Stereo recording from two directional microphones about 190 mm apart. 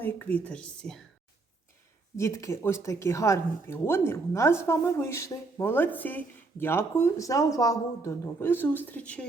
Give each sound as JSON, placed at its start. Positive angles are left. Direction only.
{"t": 0.0, "sound": "speech", "side_deg": 10}
{"t": 2.1, "sound": "speech", "side_deg": 15}